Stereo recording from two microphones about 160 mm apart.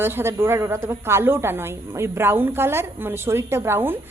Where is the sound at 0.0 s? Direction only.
15° right (ahead or behind).